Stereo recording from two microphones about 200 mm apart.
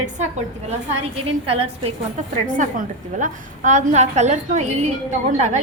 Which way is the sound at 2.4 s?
40° right (ahead or behind).